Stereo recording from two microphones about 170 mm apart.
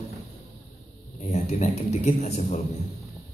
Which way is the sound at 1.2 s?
40° left (ahead or behind).